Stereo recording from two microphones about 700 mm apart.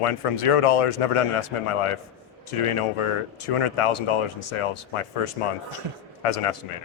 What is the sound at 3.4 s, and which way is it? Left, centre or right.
A man's voice, left.